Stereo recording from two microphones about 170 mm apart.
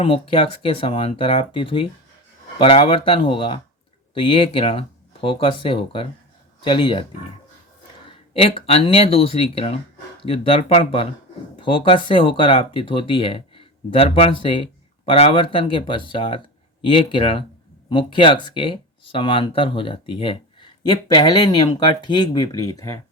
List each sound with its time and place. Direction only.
0.0 s speech: 30° left (ahead or behind)
8.3 s speech: 35° left (ahead or behind)